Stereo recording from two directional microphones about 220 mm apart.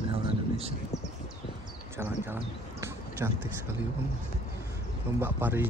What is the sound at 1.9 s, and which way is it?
Speech, 10° right (ahead or behind).